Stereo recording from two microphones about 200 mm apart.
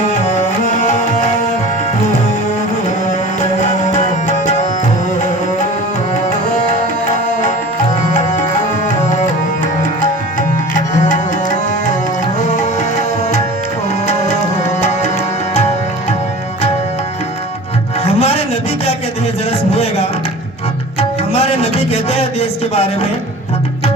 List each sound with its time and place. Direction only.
0.2 s music: 40° left (ahead or behind)
3.6 s music: 40° left (ahead or behind)
8.1 s music: 40° left (ahead or behind)
10.8 s tabla: 40° left (ahead or behind)
18.0 s music: 30° left (ahead or behind)
19.5 s a sound: 30° left (ahead or behind)
21.3 s a sound: 30° left (ahead or behind)